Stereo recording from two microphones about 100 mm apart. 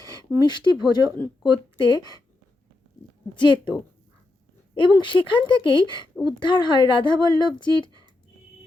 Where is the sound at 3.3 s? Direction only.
55° left (ahead or behind).